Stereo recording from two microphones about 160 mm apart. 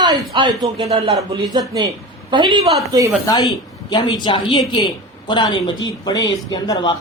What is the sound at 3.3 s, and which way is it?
Speech, 25° left (ahead or behind).